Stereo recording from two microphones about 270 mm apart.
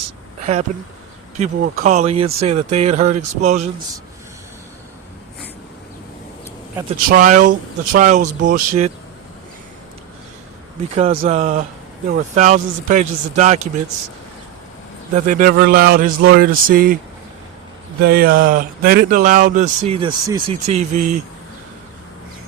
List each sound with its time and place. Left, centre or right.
0.7 s speech: right
7.0 s speech: right
10.9 s speech: right
15.1 s speech: right
18.0 s speech: right